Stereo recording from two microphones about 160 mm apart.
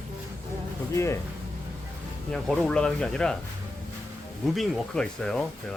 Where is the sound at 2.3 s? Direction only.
5° left (ahead or behind).